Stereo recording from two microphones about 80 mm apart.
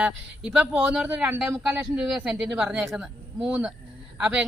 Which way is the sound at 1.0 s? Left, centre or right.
Right.